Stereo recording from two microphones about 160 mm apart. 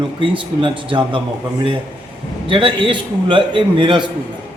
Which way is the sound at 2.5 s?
30° right (ahead or behind).